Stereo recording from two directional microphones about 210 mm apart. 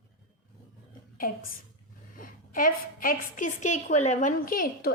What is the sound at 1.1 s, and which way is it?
A woman's voice, 45° left (ahead or behind).